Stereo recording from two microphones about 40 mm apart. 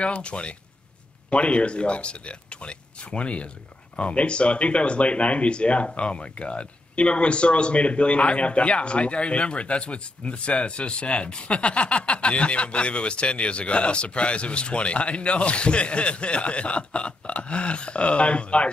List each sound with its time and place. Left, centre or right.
0.0 s speech: left